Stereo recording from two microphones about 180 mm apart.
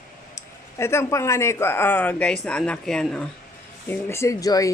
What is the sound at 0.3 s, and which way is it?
Speech, 15° left (ahead or behind).